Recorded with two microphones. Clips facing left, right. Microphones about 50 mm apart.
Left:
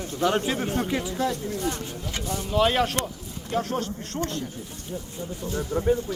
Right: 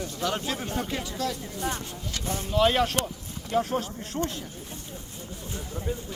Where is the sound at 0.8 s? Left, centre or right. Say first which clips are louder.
Left 4 dB; centre.